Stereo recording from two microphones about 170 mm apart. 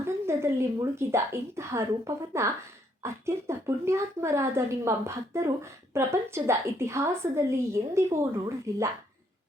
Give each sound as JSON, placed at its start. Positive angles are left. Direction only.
{"t": 0.0, "sound": "a woman's voice", "side_deg": -15}